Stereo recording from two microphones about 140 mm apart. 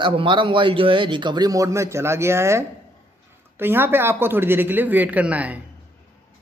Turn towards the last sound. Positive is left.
turn(degrees=-10)  # may be behind; listen again after turning